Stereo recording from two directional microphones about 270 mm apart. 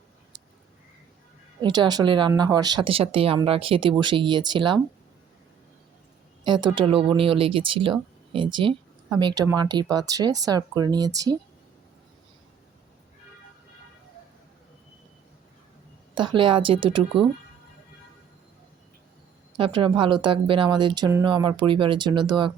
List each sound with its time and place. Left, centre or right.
1.6 s speech: centre
6.4 s speech: centre
16.1 s speech: centre
19.5 s speech: centre